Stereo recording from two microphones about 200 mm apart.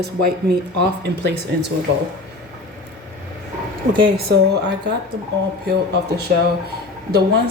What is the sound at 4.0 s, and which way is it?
Speech, 50° right (ahead or behind).